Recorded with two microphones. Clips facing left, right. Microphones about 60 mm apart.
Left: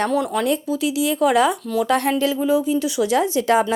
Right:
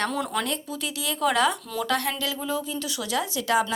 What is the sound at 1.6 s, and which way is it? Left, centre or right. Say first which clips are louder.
Speech: left 9 dB; centre.